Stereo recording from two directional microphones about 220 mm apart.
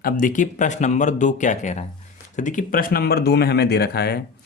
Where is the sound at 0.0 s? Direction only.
35° left (ahead or behind).